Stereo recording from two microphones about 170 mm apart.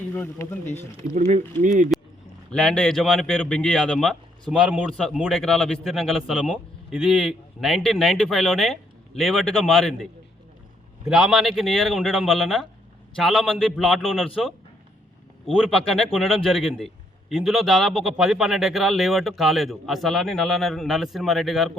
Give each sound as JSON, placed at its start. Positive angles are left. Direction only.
{"t": 0.1, "sound": "speech", "side_deg": 15}
{"t": 1.9, "sound": "a sound", "side_deg": 0}
{"t": 2.5, "sound": "a man's voice", "side_deg": 5}
{"t": 15.6, "sound": "a man's voice", "side_deg": 5}